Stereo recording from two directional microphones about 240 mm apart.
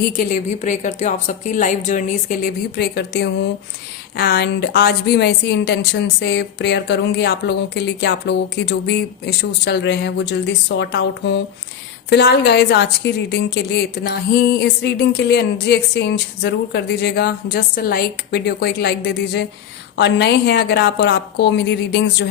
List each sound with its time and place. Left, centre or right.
0.0 s a woman's voice: left